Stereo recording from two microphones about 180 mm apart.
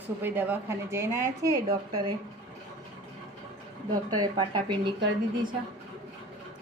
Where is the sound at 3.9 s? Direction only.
25° right (ahead or behind).